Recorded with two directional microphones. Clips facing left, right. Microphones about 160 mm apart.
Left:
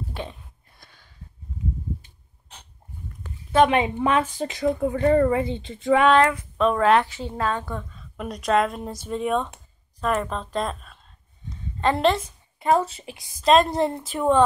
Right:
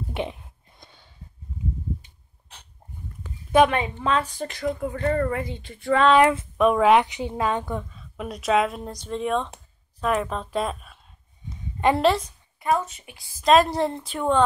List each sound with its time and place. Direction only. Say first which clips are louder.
0.1 s a sound: right 5 dB; 20° right (ahead or behind)
3.7 s speech: left 3 dB; 20° left (ahead or behind)
6.1 s a woman's voice: right 1 dB; 15° right (ahead or behind)
7.9 s a woman's voice: left 1 dB; 5° right (ahead or behind)
12.2 s a woman's voice: left 1 dB; 25° left (ahead or behind)
13.5 s speech: even; centre (ahead or behind)